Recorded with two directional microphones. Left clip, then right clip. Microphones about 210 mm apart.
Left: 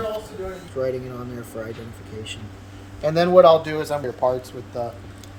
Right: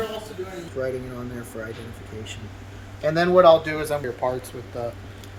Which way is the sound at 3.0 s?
55° left (ahead or behind).